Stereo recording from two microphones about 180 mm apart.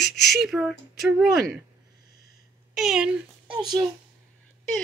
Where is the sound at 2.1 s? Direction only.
60° left (ahead or behind).